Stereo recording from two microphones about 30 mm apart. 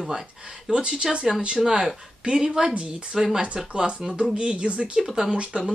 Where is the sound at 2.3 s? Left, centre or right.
Right.